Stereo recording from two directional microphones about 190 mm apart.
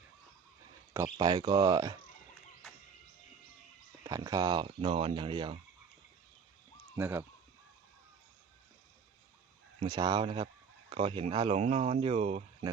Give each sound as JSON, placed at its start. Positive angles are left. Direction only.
{"t": 0.9, "sound": "speech", "side_deg": -20}
{"t": 4.0, "sound": "speech", "side_deg": -20}
{"t": 6.9, "sound": "speech", "side_deg": -10}
{"t": 9.8, "sound": "speech", "side_deg": -20}